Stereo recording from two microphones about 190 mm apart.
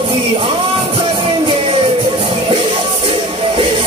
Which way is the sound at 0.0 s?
25° right (ahead or behind).